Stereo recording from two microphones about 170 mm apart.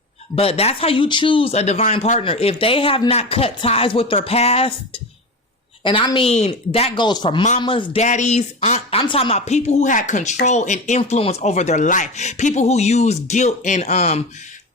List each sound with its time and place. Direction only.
0.3 s speech: 35° left (ahead or behind)
8.0 s speech: 45° left (ahead or behind)